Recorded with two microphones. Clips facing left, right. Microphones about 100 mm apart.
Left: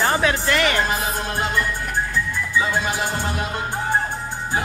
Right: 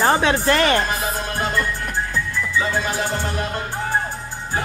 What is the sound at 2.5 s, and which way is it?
Music, 15° left (ahead or behind).